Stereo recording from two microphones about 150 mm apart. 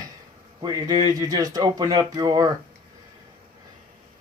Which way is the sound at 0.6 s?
25° right (ahead or behind).